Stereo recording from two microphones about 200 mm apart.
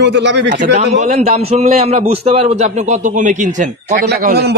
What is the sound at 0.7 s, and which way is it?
A man's voice, 35° right (ahead or behind).